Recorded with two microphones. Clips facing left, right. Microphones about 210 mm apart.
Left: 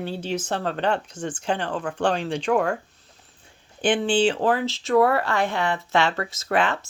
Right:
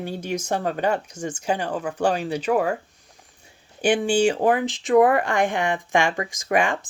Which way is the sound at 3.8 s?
10° right (ahead or behind).